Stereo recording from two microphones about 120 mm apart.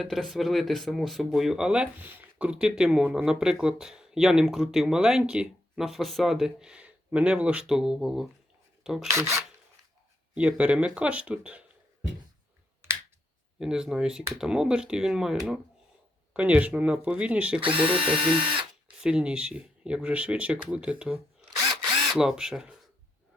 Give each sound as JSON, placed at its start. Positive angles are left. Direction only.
{"t": 0.0, "sound": "speech", "side_deg": 0}
{"t": 8.8, "sound": "filing", "side_deg": -5}
{"t": 9.0, "sound": "filing", "side_deg": -25}
{"t": 10.3, "sound": "speech", "side_deg": -10}
{"t": 13.6, "sound": "speech", "side_deg": -5}
{"t": 17.7, "sound": "speech", "side_deg": -50}
{"t": 19.0, "sound": "speech", "side_deg": -10}